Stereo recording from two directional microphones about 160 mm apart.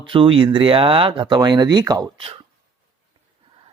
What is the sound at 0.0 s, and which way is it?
Speech, 35° right (ahead or behind).